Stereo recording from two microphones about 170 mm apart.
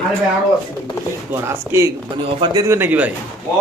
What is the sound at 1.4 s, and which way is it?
Speech, 15° right (ahead or behind).